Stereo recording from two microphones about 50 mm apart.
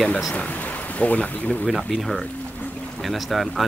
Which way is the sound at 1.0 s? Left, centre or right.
Left.